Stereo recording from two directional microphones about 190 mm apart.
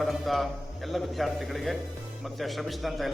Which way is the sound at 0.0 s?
Centre (ahead or behind).